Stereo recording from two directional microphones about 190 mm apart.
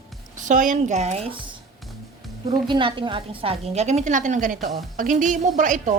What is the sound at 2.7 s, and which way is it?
A woman's voice, 25° right (ahead or behind).